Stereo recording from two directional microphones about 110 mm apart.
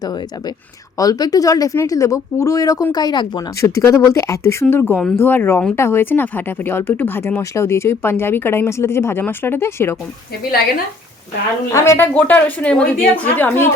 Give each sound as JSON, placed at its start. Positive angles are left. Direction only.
{"t": 0.0, "sound": "speech", "side_deg": 40}
{"t": 3.6, "sound": "speech", "side_deg": 25}
{"t": 11.7, "sound": "a woman's voice", "side_deg": 25}